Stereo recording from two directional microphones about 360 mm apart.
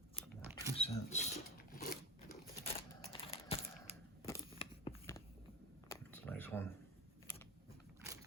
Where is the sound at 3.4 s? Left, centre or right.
Centre.